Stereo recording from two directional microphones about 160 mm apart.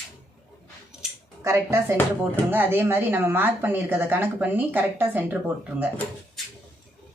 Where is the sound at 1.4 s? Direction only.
15° right (ahead or behind).